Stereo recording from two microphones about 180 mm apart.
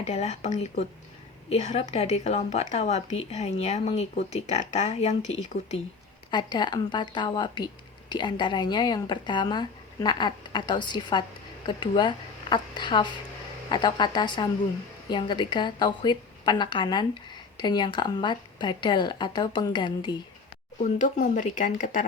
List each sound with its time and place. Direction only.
0.0 s a woman's voice: 35° left (ahead or behind)
6.3 s speech: 25° left (ahead or behind)
20.8 s speech: 45° left (ahead or behind)